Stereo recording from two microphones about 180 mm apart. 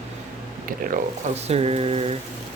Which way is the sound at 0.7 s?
50° right (ahead or behind).